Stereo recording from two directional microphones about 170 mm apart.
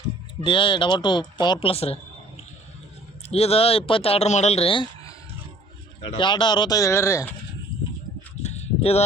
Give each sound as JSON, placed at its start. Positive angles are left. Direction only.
{"t": 0.4, "sound": "speech", "side_deg": 30}
{"t": 3.2, "sound": "speech", "side_deg": 35}
{"t": 8.4, "sound": "a sound", "side_deg": 40}